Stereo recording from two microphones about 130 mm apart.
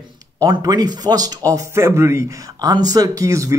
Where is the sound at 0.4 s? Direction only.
30° right (ahead or behind).